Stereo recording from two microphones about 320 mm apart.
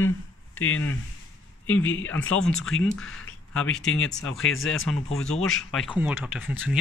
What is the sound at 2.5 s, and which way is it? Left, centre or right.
Speech, left.